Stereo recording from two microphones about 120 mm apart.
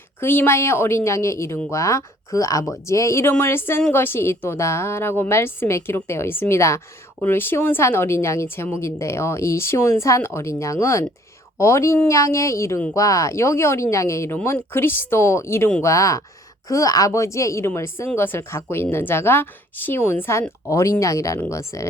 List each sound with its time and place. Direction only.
0.2 s a woman's voice: 20° left (ahead or behind)